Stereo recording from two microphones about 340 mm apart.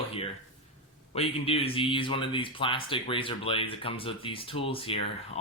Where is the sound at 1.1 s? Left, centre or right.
Centre.